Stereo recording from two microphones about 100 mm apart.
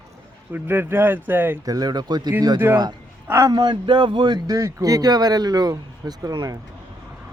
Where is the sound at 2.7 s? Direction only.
25° right (ahead or behind).